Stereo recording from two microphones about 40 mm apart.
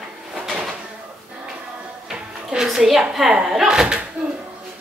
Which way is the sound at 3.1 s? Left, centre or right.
Centre.